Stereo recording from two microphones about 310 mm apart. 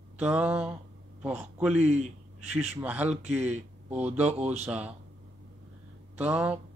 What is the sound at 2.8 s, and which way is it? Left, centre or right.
Speech, centre.